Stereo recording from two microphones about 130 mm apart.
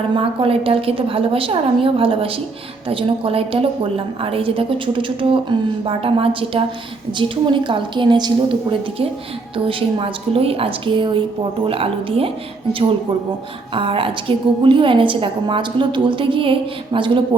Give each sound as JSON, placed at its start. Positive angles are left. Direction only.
{"t": 0.2, "sound": "a woman's voice", "side_deg": -45}
{"t": 9.6, "sound": "a woman's voice", "side_deg": -45}
{"t": 13.7, "sound": "a woman's voice", "side_deg": -45}